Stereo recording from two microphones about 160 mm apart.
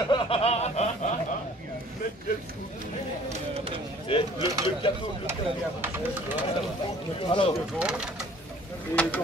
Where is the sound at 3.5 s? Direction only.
35° right (ahead or behind).